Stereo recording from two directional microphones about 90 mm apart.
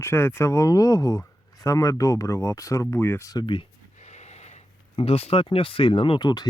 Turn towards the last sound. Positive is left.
turn(degrees=50)  # may be behind; listen again after turning